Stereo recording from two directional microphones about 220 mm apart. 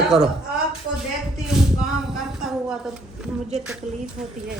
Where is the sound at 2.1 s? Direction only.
Centre (ahead or behind).